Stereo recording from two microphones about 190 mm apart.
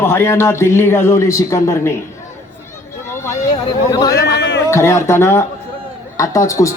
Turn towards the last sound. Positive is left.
turn(degrees=15)  # may be behind; listen again after turning